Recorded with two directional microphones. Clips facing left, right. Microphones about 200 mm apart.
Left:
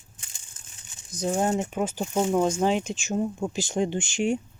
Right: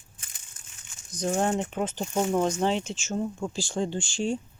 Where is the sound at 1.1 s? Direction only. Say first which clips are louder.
Left 1 dB; 5° left (ahead or behind).